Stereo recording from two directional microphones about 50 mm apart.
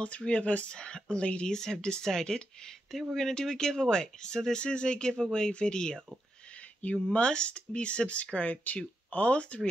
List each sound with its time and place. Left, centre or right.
0.0 s speech: left
7.1 s speech: left